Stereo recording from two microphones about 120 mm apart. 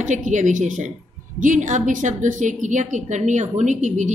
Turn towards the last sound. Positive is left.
turn(degrees=-90)